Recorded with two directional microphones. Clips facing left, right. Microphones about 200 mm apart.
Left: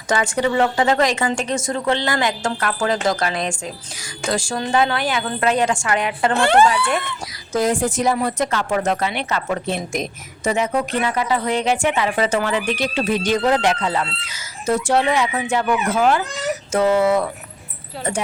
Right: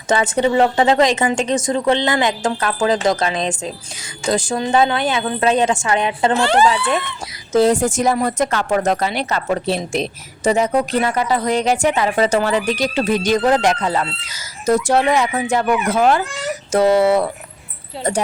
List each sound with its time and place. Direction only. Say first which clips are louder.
0.1 s a woman's voice: right 3 dB; 25° right (ahead or behind)
6.3 s speech: left 2 dB; 55° left (ahead or behind)
6.7 s a woman's voice: right 2 dB; 20° right (ahead or behind)
7.7 s speech: right 3 dB; 45° right (ahead or behind)